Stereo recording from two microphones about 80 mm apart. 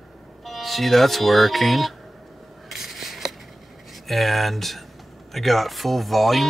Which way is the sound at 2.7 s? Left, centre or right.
Centre.